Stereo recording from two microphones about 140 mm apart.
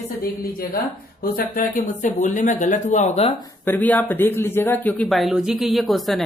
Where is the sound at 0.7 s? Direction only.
85° left; by 3.3 s 55° left (ahead or behind).